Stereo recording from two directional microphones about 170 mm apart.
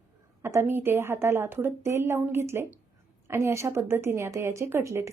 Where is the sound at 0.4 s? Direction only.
15° right (ahead or behind).